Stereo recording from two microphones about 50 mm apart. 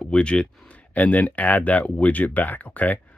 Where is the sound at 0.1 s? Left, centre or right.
Left.